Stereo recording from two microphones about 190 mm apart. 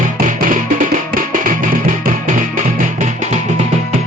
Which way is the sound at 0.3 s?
45° right (ahead or behind).